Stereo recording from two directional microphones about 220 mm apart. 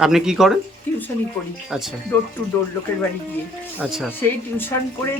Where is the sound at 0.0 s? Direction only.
5° right (ahead or behind).